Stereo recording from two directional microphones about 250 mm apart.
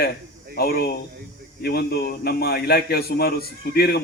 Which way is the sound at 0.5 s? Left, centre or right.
Left.